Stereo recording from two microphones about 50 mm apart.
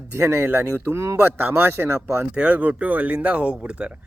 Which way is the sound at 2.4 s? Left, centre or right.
Right.